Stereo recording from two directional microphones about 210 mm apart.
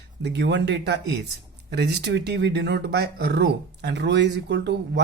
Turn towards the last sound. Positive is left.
turn(degrees=-55)  # may be behind; listen again after turning